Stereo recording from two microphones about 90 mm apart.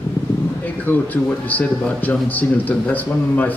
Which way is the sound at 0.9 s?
25° left (ahead or behind).